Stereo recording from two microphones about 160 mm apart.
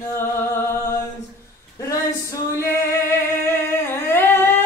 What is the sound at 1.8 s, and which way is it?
Singing, 20° left (ahead or behind).